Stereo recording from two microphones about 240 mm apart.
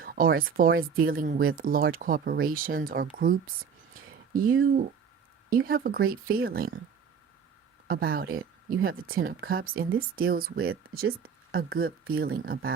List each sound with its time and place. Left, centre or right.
0.0 s speech: right
3.9 s a sound: right
5.5 s speech: right
7.9 s speech: right